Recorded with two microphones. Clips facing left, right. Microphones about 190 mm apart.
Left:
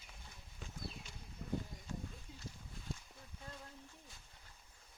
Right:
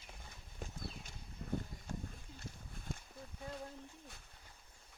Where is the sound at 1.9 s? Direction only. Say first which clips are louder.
Right 1 dB; 50° right (ahead or behind).